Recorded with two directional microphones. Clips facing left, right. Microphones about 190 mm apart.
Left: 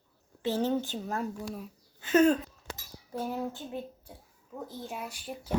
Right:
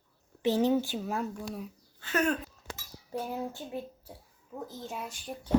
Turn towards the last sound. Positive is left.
turn(degrees=5)  # may be behind; listen again after turning